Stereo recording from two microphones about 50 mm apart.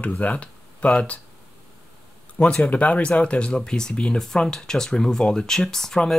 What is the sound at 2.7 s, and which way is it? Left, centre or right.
Speech, left.